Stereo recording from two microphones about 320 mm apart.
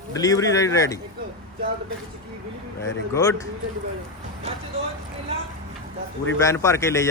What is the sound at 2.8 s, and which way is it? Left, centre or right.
Speech, centre.